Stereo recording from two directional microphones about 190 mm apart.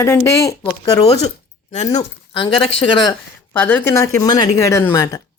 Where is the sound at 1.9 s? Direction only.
25° left (ahead or behind).